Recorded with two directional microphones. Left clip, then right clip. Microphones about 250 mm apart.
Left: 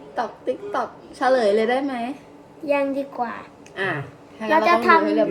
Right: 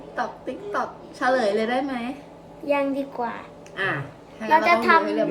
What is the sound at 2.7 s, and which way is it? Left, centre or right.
Speech, centre.